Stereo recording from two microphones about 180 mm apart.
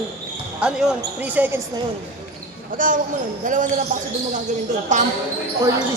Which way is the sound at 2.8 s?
50° right (ahead or behind).